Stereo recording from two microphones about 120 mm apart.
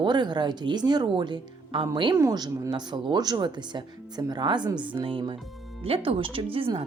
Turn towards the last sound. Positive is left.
turn(degrees=-50)  # may be behind; listen again after turning